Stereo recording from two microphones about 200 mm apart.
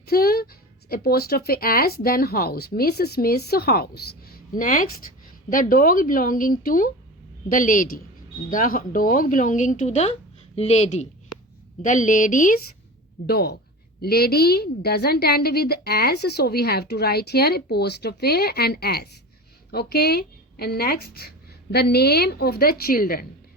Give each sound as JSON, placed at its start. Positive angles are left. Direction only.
{"t": 0.0, "sound": "speech", "side_deg": 50}
{"t": 13.2, "sound": "speech", "side_deg": 55}